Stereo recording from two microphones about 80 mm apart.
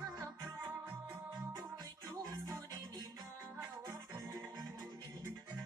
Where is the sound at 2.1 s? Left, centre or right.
Right.